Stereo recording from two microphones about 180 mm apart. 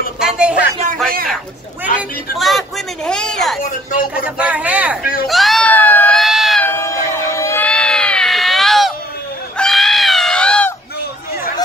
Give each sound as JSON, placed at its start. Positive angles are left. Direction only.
{"t": 0.2, "sound": "speech", "side_deg": -5}
{"t": 1.0, "sound": "a man's voice", "side_deg": -55}
{"t": 2.0, "sound": "speech", "side_deg": 0}
{"t": 5.2, "sound": "a sound", "side_deg": 0}
{"t": 6.6, "sound": "crowd", "side_deg": 15}
{"t": 9.6, "sound": "goat", "side_deg": 0}